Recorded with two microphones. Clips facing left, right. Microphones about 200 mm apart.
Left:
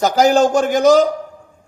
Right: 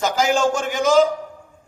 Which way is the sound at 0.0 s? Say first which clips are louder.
Left 6 dB; 40° left (ahead or behind).